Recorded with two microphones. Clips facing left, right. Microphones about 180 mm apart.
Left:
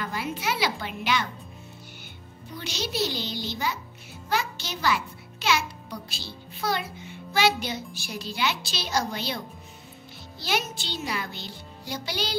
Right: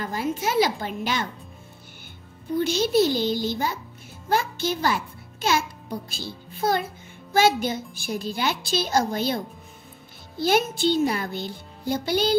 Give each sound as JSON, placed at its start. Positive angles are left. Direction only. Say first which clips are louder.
{"t": 0.0, "sound": "a child's voice", "louder": "right 4 dB", "side_deg": -45}
{"t": 2.5, "sound": "a child's voice", "louder": "right 12 dB", "side_deg": -50}